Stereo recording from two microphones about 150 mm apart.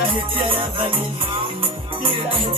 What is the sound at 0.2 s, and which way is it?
Music, 35° right (ahead or behind).